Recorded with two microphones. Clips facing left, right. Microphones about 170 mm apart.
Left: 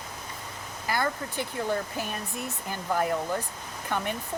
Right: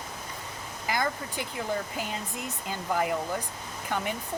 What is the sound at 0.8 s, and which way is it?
Speech, 15° right (ahead or behind).